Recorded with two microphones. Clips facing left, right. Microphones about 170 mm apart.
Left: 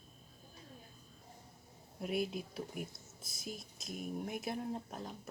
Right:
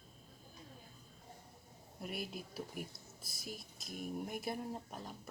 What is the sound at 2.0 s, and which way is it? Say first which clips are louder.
Speech: left 7 dB; centre (ahead or behind).